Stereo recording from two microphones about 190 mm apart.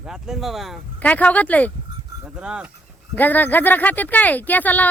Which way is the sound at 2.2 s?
5° right (ahead or behind).